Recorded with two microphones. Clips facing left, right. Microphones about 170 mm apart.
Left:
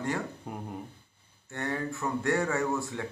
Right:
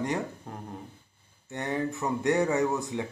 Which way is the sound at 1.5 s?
20° right (ahead or behind).